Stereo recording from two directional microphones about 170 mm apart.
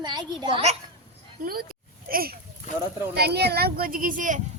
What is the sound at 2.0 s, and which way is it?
Speech, 60° right (ahead or behind).